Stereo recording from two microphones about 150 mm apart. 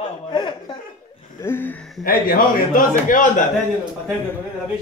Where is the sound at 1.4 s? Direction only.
15° left (ahead or behind).